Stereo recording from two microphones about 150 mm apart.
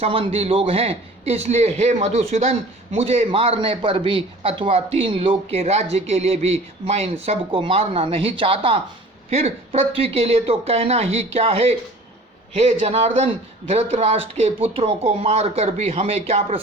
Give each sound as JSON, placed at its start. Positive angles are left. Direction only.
{"t": 0.0, "sound": "a man's voice", "side_deg": -35}